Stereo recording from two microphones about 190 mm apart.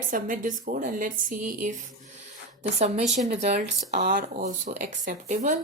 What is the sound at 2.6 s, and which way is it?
Speech, 35° right (ahead or behind).